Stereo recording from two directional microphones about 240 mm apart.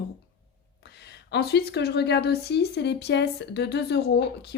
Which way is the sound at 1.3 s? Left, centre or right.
Left.